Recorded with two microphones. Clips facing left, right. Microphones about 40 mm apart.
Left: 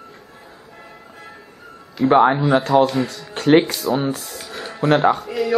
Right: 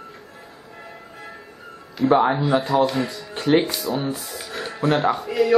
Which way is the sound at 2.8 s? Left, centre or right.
Centre.